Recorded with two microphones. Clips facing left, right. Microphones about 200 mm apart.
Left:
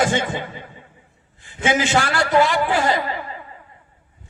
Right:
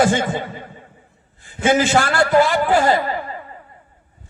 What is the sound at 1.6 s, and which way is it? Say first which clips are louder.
A man's voice: right 3 dB; 45° right (ahead or behind).